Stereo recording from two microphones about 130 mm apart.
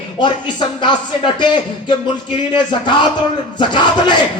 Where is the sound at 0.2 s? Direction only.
35° left (ahead or behind).